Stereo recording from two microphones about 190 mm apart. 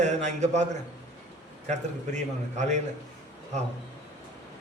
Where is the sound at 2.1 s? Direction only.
40° right (ahead or behind).